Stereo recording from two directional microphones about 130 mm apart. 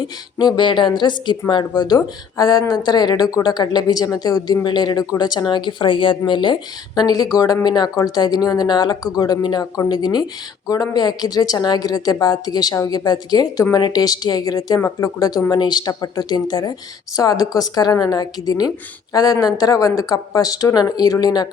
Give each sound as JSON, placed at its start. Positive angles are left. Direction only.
{"t": 0.3, "sound": "speech", "side_deg": 35}